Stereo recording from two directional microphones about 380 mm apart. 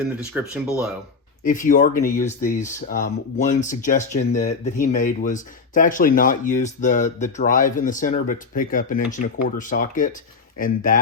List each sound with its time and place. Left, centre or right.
0.2 s speech: centre
1.5 s speech: centre